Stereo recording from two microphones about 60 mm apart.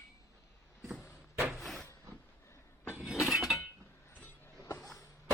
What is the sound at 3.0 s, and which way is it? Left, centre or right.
Breaking, centre.